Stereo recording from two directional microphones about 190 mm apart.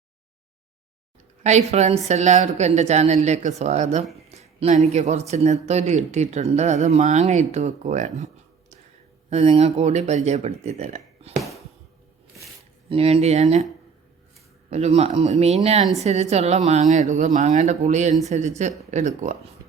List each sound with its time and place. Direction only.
1.5 s speech: 35° right (ahead or behind)
9.3 s speech: 35° right (ahead or behind)
12.9 s speech: 30° right (ahead or behind)
14.7 s speech: 35° right (ahead or behind)